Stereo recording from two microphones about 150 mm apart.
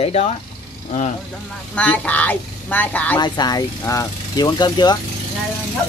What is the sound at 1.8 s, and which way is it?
Speech, 10° left (ahead or behind).